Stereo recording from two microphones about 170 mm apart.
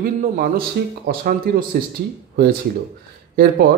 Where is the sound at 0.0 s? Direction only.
60° right (ahead or behind).